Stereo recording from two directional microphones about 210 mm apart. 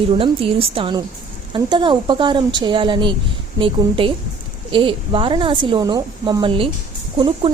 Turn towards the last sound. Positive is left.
turn(degrees=-20)  # may be behind; listen again after turning